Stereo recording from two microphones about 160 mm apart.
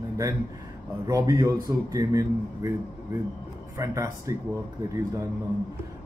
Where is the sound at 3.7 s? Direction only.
20° right (ahead or behind).